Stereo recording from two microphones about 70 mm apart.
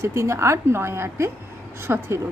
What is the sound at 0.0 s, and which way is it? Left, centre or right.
Speech, right.